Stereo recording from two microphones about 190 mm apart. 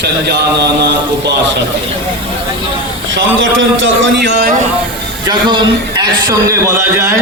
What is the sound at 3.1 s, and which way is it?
A man's voice, 80° right.